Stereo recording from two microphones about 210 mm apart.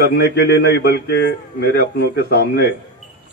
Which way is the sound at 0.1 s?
55° left (ahead or behind).